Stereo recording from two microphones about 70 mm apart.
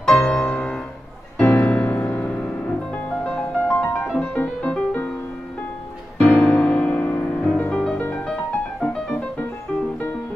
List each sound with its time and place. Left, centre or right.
0.1 s music: centre
6.1 s music: centre
8.8 s music: centre